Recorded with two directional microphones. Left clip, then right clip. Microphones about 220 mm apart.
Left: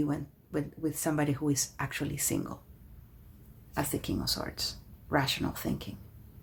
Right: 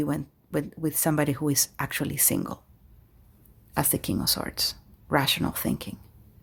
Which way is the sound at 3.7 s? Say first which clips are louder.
Right 5 dB; 50° right (ahead or behind).